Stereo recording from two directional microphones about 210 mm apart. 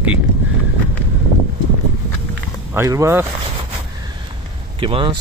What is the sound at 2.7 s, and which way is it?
Speech, 15° right (ahead or behind).